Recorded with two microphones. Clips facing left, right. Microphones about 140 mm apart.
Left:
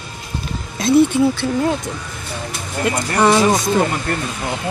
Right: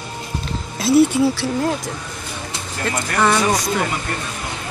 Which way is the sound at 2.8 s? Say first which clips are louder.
Left 3 dB; 15° left (ahead or behind).